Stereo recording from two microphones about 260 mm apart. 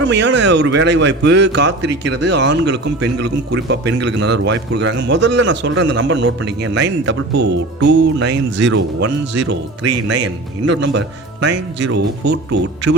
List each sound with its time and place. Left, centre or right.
0.1 s a man's voice: right